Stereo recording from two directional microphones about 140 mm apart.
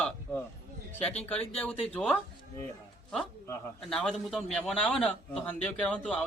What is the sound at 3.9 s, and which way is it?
A man's voice, 5° left (ahead or behind).